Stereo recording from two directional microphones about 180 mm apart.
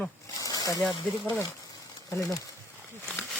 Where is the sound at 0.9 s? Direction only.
25° left (ahead or behind).